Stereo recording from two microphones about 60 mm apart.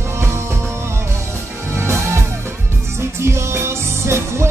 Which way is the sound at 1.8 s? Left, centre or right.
Right.